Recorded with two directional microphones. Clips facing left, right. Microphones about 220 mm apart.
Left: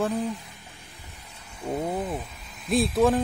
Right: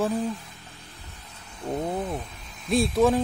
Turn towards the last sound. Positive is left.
turn(degrees=0)  # may be behind; listen again after turning